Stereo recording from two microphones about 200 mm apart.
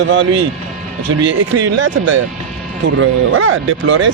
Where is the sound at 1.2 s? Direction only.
70° right (ahead or behind).